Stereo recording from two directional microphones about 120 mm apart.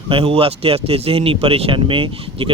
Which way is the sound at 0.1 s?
50° right (ahead or behind).